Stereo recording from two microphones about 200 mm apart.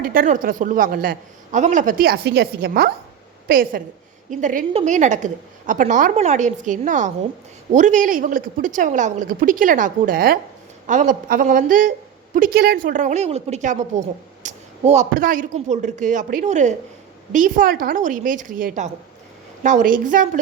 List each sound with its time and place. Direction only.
0.0 s a woman's voice: 45° right (ahead or behind)